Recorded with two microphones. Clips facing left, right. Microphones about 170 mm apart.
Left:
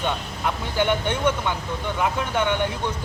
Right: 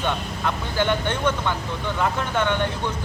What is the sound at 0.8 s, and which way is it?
Speech, 15° left (ahead or behind).